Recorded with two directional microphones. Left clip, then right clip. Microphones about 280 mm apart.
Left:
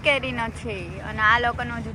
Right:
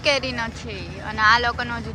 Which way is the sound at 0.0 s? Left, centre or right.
Centre.